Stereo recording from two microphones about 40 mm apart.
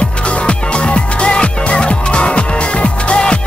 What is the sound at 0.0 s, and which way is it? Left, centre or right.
Music, left.